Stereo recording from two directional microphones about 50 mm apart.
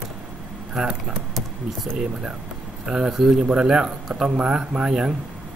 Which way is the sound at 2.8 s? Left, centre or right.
Centre.